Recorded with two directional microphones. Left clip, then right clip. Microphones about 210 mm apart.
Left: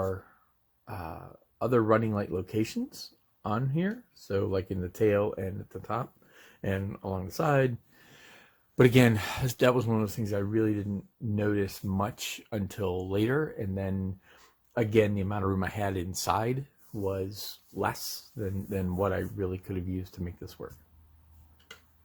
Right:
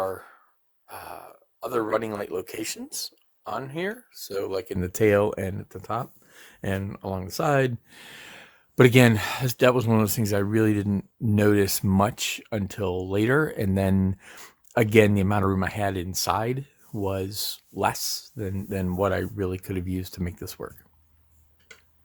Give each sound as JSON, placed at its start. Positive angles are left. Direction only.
{"t": 0.9, "sound": "a sound", "side_deg": -30}
{"t": 1.7, "sound": "speech", "side_deg": -30}
{"t": 8.0, "sound": "speech", "side_deg": -30}
{"t": 15.4, "sound": "speech", "side_deg": -25}
{"t": 17.0, "sound": "speech", "side_deg": -35}